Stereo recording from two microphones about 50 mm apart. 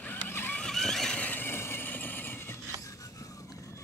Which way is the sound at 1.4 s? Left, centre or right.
Left.